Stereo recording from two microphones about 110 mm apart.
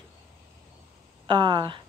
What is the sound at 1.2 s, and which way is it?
Speech, 45° right (ahead or behind).